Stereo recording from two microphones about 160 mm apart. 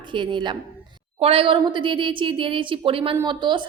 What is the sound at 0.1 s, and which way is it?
A woman's voice, 30° right (ahead or behind).